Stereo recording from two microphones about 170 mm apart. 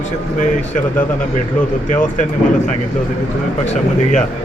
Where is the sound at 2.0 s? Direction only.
45° left (ahead or behind).